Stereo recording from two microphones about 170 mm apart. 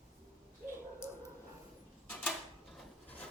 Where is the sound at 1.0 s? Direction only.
15° left (ahead or behind).